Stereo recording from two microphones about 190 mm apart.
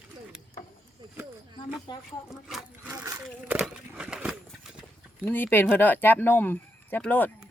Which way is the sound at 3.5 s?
5° right (ahead or behind).